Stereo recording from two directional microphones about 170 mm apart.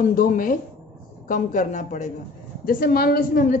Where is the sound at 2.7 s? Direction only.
60° left (ahead or behind).